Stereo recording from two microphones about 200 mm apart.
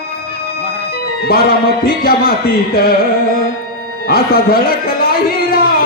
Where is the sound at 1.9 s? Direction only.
50° left (ahead or behind).